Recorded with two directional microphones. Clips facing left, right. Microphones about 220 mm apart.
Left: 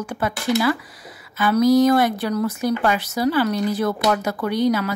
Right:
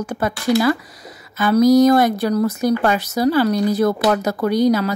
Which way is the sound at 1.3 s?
40° right (ahead or behind).